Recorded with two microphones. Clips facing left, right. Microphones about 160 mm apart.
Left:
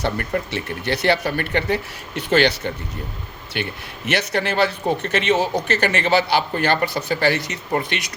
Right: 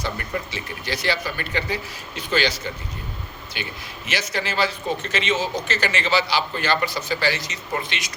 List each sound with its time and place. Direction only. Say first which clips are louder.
0.0 s speech: left 5 dB; 60° left (ahead or behind)
4.1 s speech: left 5 dB; 65° left (ahead or behind)